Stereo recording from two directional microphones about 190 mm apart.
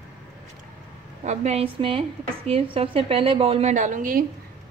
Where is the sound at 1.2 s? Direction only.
35° right (ahead or behind).